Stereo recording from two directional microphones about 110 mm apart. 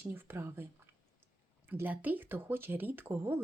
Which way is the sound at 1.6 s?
15° right (ahead or behind).